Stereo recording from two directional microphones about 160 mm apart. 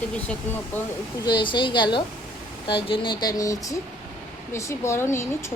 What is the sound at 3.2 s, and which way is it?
A woman's voice, 20° left (ahead or behind).